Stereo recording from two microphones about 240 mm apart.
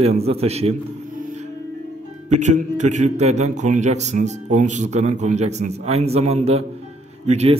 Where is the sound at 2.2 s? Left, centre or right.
Right.